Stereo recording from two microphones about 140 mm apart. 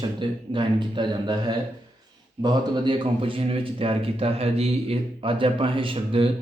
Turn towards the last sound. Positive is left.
turn(degrees=-40)  # may be behind; listen again after turning